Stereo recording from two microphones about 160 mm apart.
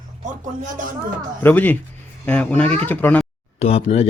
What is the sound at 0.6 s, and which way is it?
Speech, 55° right (ahead or behind).